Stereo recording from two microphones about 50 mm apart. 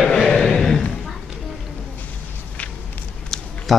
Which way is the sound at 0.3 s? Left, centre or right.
Centre.